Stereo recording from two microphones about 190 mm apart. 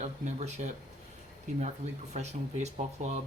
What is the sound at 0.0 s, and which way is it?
Speech, 35° right (ahead or behind).